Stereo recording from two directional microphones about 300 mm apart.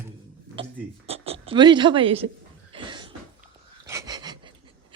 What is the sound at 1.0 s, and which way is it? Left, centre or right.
Speech, centre.